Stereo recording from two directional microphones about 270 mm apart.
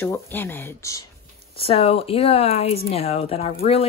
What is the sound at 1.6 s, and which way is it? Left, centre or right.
Speech, left.